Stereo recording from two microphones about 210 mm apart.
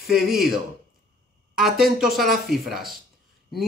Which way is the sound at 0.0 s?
Centre (ahead or behind).